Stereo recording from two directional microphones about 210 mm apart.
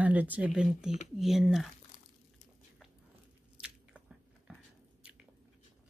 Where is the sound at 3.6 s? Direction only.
5° right (ahead or behind).